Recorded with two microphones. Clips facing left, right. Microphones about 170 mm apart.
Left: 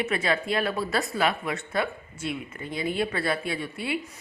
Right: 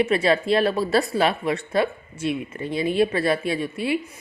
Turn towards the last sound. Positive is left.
turn(degrees=-25)  # may be behind; listen again after turning